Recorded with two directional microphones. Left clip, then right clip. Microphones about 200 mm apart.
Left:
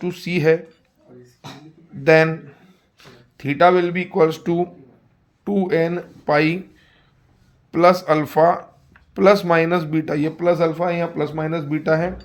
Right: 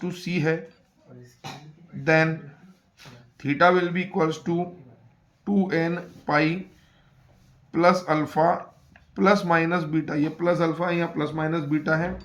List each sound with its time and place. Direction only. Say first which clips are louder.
0.0 s a man's voice: left 8 dB; 30° left (ahead or behind)
2.0 s a man's voice: left 7 dB; 40° left (ahead or behind)
3.3 s a man's voice: left 5 dB; 35° left (ahead or behind)
7.7 s a man's voice: left 6 dB; 40° left (ahead or behind)